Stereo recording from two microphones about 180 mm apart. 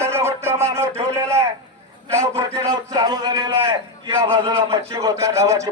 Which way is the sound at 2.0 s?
15° right (ahead or behind).